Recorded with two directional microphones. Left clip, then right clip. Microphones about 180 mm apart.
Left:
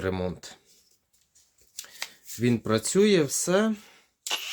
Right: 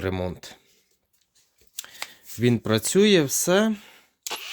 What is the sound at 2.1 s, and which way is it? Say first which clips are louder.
Speech: right 4 dB; 45° right (ahead or behind).